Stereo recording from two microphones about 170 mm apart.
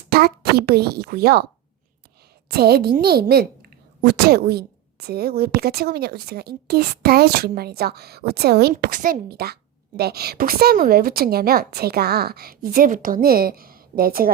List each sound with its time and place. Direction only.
0.1 s a woman's voice: 65° right (ahead or behind)
2.5 s a woman's voice: 65° right (ahead or behind)
8.7 s a woman's voice: 50° right (ahead or behind)
9.3 s a woman's voice: 70° right (ahead or behind)